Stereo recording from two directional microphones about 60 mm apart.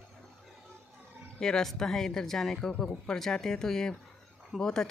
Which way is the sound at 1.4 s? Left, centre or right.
Centre.